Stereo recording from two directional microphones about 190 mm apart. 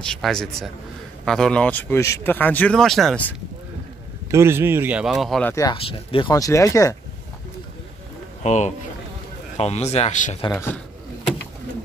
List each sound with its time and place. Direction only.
0.0 s a man's voice: 5° left (ahead or behind)
4.3 s speech: 15° right (ahead or behind)
5.5 s speech: 15° left (ahead or behind)
5.8 s speech: 30° left (ahead or behind)
8.4 s speech: 40° left (ahead or behind)
10.5 s speech: 10° left (ahead or behind)